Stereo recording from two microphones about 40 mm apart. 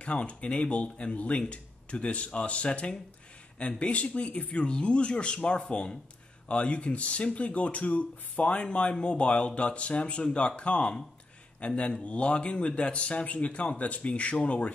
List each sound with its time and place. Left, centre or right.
0.0 s speech: left